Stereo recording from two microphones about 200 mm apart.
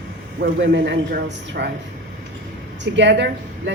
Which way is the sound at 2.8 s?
60° right (ahead or behind).